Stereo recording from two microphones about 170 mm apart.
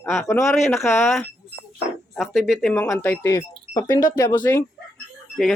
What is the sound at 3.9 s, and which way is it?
Speech, 55° left (ahead or behind).